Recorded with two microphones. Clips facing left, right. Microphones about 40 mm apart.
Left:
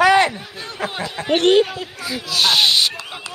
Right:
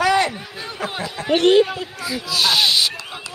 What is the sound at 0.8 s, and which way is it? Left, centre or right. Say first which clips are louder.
Speech: left 2 dB; left.